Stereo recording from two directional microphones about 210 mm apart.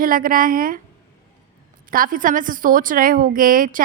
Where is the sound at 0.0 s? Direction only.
40° right (ahead or behind).